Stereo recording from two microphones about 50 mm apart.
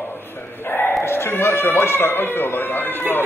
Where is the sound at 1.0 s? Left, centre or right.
Left.